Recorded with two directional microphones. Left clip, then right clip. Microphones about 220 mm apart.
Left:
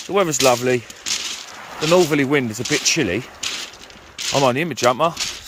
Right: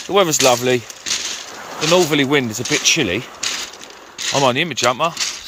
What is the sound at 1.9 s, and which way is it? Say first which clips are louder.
Speech: right 1 dB; 20° left (ahead or behind).